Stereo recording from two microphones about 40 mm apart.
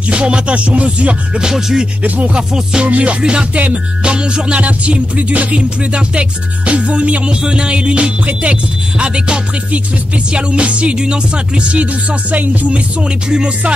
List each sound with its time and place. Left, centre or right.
0.1 s music: right
1.4 s music: centre
2.0 s music: right
2.3 s music: centre
3.5 s music: right
4.0 s music: right
5.6 s music: right
13.3 s music: right